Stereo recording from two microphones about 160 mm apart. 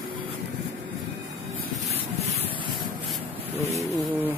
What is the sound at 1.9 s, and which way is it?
Rub, 40° right (ahead or behind).